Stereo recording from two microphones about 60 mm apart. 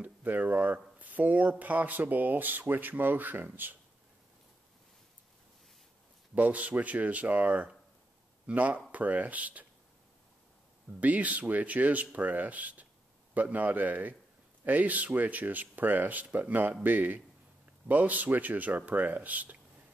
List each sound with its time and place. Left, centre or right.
0.0 s speech: right
6.3 s speech: right
11.0 s speech: right